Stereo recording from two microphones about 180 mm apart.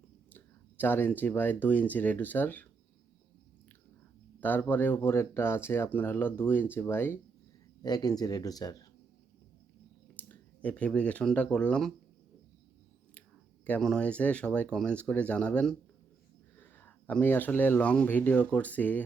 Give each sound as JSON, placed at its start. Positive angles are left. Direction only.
{"t": 0.3, "sound": "speech", "side_deg": 10}
{"t": 4.4, "sound": "speech", "side_deg": 10}
{"t": 10.2, "sound": "speech", "side_deg": 10}
{"t": 13.7, "sound": "speech", "side_deg": 5}